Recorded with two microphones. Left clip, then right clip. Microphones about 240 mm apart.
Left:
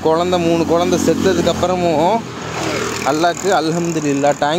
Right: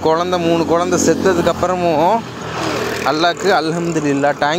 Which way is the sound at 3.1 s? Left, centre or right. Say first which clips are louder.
Right 1 dB; centre.